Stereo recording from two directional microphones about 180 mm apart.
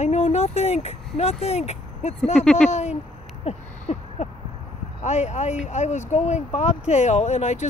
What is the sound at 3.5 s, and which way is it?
Owl, 40° left (ahead or behind).